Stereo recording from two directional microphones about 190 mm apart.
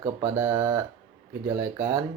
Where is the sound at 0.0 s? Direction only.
15° right (ahead or behind).